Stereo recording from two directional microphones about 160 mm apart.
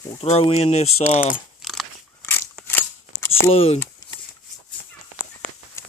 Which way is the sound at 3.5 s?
40° left (ahead or behind).